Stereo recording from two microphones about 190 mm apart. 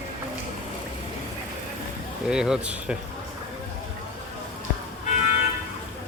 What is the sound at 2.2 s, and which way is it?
Speech, 5° right (ahead or behind).